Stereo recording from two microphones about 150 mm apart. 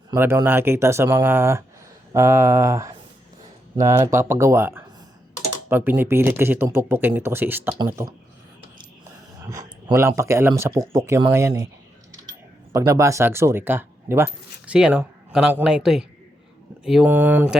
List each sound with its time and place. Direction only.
0.1 s speech: 20° right (ahead or behind)
9.4 s speech: 20° right (ahead or behind)
12.7 s a man's voice: 20° right (ahead or behind)